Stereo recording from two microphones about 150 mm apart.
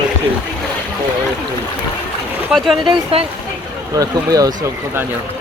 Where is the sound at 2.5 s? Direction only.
Centre (ahead or behind).